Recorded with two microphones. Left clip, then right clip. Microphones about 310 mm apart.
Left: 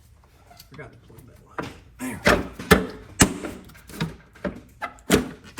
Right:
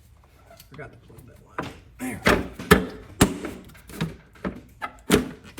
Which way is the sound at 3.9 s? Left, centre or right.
Centre.